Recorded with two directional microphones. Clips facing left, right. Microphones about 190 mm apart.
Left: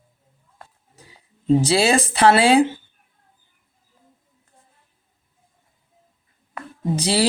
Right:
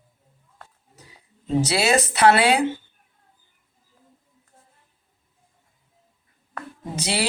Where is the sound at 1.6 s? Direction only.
30° left (ahead or behind).